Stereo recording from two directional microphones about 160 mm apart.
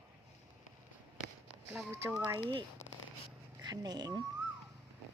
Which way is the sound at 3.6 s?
25° right (ahead or behind).